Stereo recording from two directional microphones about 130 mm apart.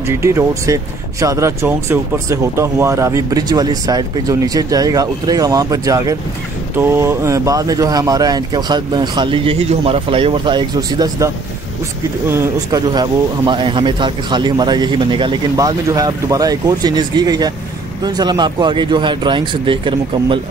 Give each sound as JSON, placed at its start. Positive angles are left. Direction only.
{"t": 0.1, "sound": "speech", "side_deg": -20}
{"t": 12.7, "sound": "speech", "side_deg": -35}